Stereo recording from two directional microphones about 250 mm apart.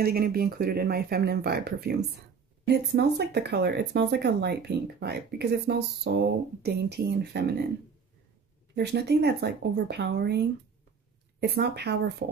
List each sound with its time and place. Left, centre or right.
0.0 s speech: right
8.7 s speech: right